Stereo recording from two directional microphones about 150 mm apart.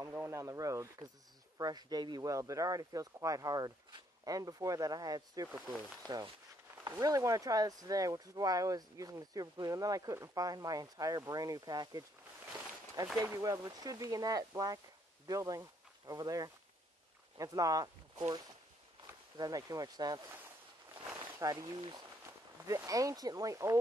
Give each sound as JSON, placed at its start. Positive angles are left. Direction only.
{"t": 0.0, "sound": "speech", "side_deg": -15}
{"t": 13.2, "sound": "speech", "side_deg": -20}
{"t": 19.3, "sound": "speech", "side_deg": -25}
{"t": 21.2, "sound": "a sound", "side_deg": -25}
{"t": 22.7, "sound": "speech", "side_deg": -20}